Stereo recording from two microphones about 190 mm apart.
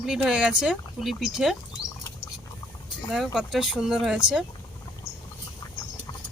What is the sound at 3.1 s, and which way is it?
Speech, centre (ahead or behind).